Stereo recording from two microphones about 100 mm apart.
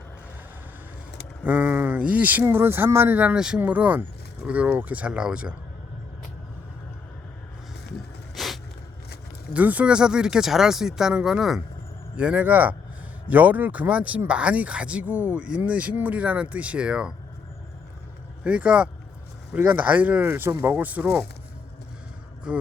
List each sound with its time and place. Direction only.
1.5 s speech: 15° right (ahead or behind)
8.4 s a sound: centre (ahead or behind)
9.5 s speech: 15° right (ahead or behind)
18.4 s speech: 10° right (ahead or behind)
22.5 s speech: 10° right (ahead or behind)